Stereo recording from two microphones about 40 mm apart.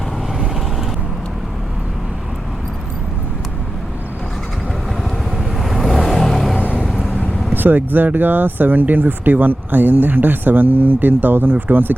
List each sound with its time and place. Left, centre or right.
5.4 s vehicle: centre
6.7 s vehicle: centre
7.5 s speech: right